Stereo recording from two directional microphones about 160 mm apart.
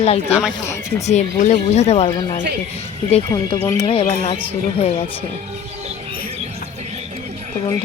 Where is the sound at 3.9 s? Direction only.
35° left (ahead or behind).